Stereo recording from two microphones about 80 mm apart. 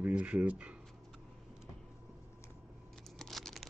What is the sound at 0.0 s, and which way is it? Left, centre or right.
Speech, centre.